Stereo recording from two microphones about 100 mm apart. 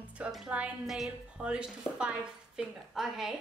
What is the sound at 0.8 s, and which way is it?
A woman's voice, centre (ahead or behind).